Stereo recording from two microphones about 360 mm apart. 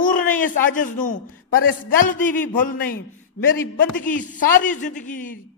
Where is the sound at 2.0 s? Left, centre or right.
Left.